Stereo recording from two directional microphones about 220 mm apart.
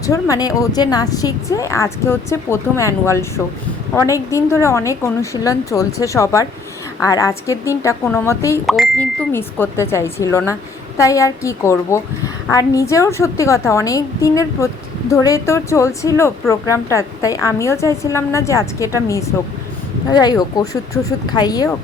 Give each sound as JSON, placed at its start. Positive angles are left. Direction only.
{"t": 0.0, "sound": "speech", "side_deg": 15}
{"t": 8.6, "sound": "speech", "side_deg": 0}
{"t": 9.3, "sound": "speech", "side_deg": 10}
{"t": 20.1, "sound": "speech", "side_deg": 15}